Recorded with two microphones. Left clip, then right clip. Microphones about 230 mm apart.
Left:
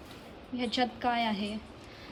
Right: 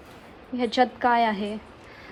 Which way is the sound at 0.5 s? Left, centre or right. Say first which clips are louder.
Right 8 dB; right.